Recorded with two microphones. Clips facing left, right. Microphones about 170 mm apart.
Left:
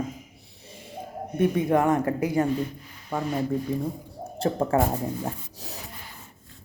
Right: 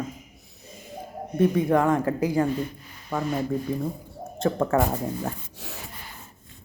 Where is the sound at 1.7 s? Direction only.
25° left (ahead or behind).